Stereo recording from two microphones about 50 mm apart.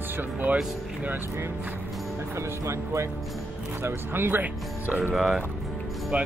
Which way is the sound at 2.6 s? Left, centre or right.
Right.